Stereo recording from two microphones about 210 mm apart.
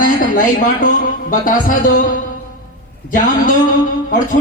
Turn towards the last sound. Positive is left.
turn(degrees=40)  # may be behind; listen again after turning